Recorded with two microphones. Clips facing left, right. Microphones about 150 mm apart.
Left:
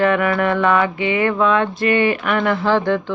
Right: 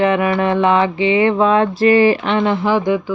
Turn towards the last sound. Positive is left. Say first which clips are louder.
# right 1 dB
turn(degrees=-10)  # may be behind; listen again after turning